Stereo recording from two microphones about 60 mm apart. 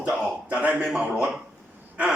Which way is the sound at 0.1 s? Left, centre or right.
Right.